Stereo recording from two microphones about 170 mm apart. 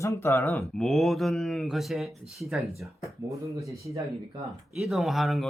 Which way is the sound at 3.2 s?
20° right (ahead or behind).